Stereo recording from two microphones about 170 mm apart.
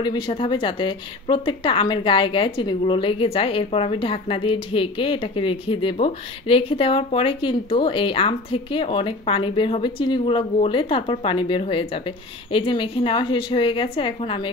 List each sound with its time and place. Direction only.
0.0 s speech: 30° left (ahead or behind)